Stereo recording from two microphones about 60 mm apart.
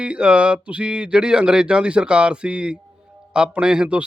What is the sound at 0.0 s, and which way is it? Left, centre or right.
Speech, centre.